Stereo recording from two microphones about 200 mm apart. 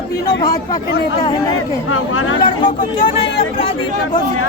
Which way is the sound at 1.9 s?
85° left.